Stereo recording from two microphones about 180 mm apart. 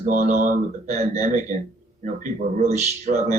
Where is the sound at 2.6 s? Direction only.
40° right (ahead or behind).